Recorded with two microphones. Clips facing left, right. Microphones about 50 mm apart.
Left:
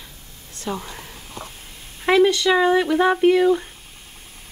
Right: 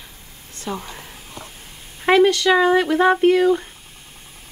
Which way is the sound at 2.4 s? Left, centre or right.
Centre.